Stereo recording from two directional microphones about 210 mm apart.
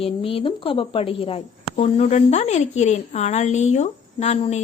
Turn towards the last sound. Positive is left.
turn(degrees=30)  # may be behind; listen again after turning